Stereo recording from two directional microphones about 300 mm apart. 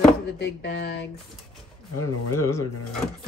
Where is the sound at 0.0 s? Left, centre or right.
Left.